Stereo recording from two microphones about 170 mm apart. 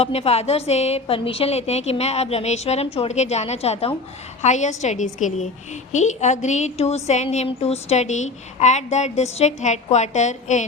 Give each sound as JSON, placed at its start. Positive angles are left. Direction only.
{"t": 0.0, "sound": "a woman's voice", "side_deg": 35}